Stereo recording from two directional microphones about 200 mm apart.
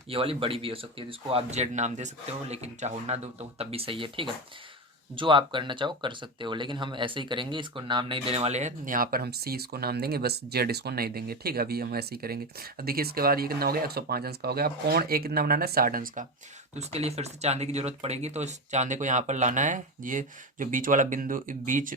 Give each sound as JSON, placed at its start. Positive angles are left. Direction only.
{"t": 0.1, "sound": "speech", "side_deg": -30}
{"t": 16.7, "sound": "speech", "side_deg": -30}